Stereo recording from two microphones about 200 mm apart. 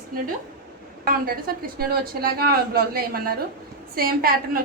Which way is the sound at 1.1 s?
45° right (ahead or behind).